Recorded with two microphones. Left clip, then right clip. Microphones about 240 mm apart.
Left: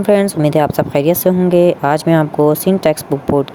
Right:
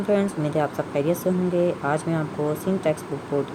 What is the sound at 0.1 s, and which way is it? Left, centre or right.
Speech, left.